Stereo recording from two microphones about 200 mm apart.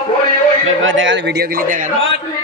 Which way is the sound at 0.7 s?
75° right (ahead or behind).